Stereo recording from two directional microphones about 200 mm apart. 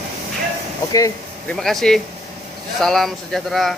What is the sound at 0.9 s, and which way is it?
Speech, 15° left (ahead or behind).